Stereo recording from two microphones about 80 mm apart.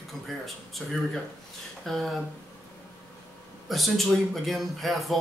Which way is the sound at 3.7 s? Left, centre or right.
Centre.